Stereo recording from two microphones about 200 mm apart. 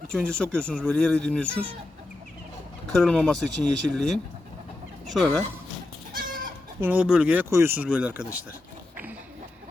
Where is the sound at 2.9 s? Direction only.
5° left (ahead or behind).